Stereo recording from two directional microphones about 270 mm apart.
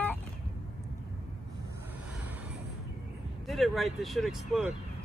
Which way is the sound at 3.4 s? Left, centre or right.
Centre.